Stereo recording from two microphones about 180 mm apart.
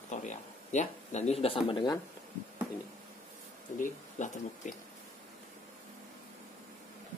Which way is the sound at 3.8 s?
45° left (ahead or behind).